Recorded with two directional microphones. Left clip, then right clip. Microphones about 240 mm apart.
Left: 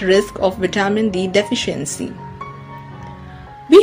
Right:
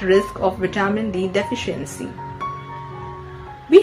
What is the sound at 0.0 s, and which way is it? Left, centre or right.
Speech, left.